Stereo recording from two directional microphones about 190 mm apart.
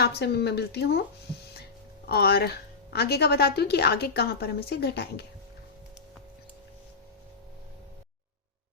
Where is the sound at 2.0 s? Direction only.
55° left (ahead or behind).